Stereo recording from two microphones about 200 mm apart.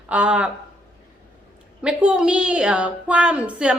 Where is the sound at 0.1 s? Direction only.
5° right (ahead or behind).